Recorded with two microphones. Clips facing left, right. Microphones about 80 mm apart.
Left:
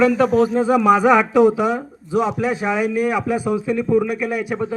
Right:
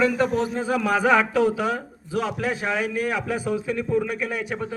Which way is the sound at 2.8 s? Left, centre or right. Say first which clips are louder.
Left 6 dB; centre.